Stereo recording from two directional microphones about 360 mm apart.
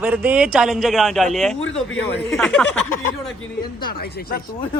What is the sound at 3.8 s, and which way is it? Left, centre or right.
Speech, left.